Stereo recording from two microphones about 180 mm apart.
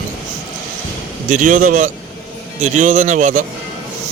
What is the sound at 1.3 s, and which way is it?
A man's voice, 45° right (ahead or behind).